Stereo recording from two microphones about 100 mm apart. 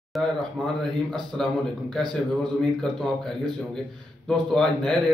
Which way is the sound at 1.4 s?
5° left (ahead or behind).